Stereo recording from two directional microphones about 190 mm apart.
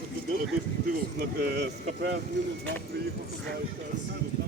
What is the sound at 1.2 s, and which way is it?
Speech, 55° right (ahead or behind).